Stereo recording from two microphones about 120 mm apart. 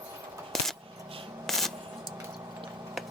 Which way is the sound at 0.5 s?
5° left (ahead or behind).